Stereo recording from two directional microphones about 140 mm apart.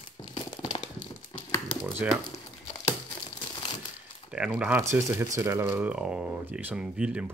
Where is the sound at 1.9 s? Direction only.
5° right (ahead or behind).